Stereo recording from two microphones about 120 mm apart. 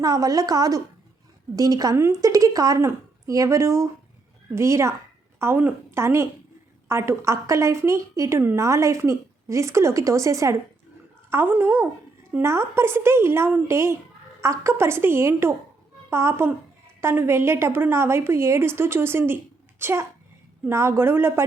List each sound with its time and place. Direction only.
0.0 s a woman's voice: 30° right (ahead or behind)